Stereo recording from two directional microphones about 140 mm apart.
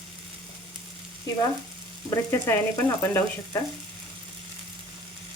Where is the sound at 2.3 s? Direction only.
15° left (ahead or behind).